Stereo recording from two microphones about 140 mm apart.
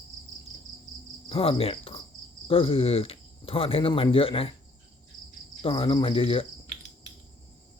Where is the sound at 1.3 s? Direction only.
40° left (ahead or behind).